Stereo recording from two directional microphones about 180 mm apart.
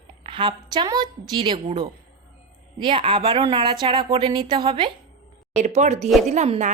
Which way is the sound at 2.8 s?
25° right (ahead or behind).